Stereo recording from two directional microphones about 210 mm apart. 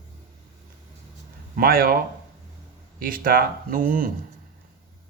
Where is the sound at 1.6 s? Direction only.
45° right (ahead or behind).